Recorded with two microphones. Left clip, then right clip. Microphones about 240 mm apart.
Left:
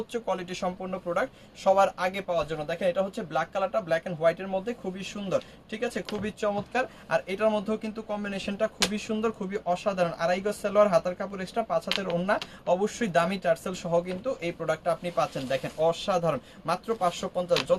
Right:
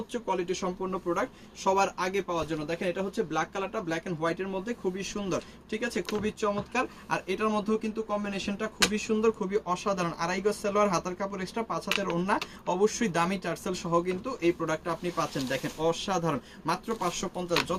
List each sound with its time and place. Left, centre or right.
0.1 s speech: left; by 11.8 s centre
11.9 s speech: centre
12.1 s speech: centre